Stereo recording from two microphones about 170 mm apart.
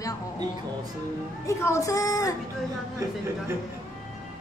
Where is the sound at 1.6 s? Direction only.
15° left (ahead or behind).